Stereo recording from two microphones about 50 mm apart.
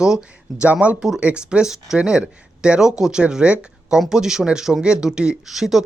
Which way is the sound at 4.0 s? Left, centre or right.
Centre.